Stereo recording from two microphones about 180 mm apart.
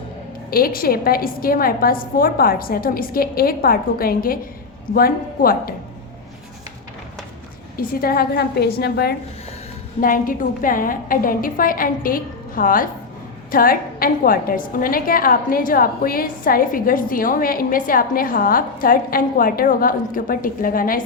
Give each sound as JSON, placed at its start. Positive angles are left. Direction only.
{"t": 0.5, "sound": "a woman's voice", "side_deg": 55}
{"t": 7.8, "sound": "a woman's voice", "side_deg": 55}
{"t": 10.0, "sound": "a woman's voice", "side_deg": 50}